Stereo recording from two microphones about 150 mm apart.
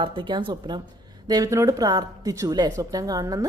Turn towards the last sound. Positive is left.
turn(degrees=-25)  # may be behind; listen again after turning